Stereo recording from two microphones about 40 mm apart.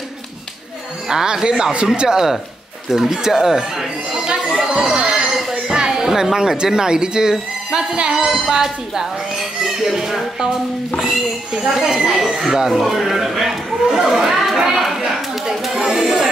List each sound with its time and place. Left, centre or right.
1.0 s speech: centre
4.9 s a sound: centre
5.5 s speech: centre
8.3 s speech: centre
15.5 s chatter: centre